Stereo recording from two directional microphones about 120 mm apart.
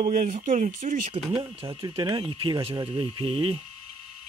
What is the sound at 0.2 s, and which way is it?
Speech, 75° right (ahead or behind).